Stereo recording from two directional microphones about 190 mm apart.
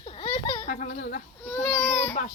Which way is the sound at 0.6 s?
45° left (ahead or behind).